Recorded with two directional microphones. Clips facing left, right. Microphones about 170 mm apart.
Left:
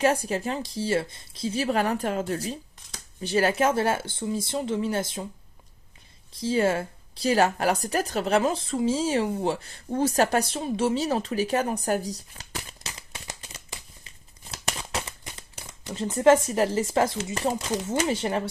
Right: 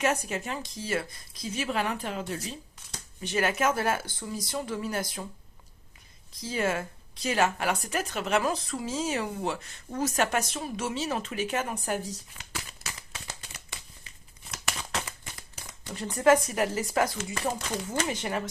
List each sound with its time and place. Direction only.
0.0 s speech: 30° left (ahead or behind)
3.2 s speech: 35° left (ahead or behind)
6.3 s speech: 30° left (ahead or behind)
14.5 s crumpling: 30° left (ahead or behind)
14.9 s a sound: 20° left (ahead or behind)
15.5 s speech: 30° left (ahead or behind)